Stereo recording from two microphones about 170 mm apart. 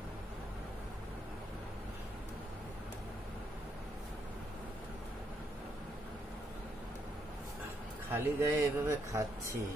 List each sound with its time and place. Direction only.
8.1 s speech: 15° right (ahead or behind)